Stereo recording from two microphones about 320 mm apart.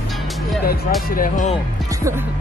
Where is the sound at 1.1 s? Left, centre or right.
Left.